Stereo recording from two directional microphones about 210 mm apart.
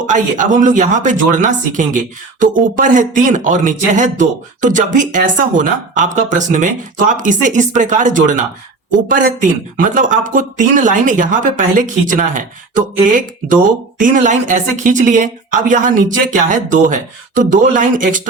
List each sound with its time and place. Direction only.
0.1 s speech: 40° right (ahead or behind)